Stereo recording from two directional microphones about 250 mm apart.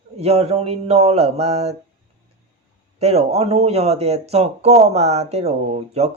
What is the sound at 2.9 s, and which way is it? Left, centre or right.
Speech, right.